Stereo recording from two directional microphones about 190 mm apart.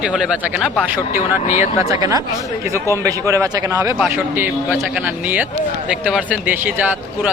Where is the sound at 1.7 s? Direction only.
15° right (ahead or behind).